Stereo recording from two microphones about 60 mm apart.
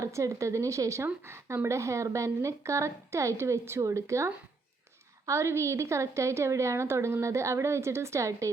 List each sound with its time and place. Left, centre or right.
0.0 s a woman's voice: right